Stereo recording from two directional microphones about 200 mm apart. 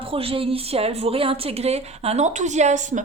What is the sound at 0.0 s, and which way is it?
Speech, 25° right (ahead or behind).